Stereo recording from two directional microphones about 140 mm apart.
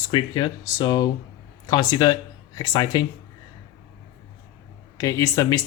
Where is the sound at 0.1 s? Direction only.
35° left (ahead or behind).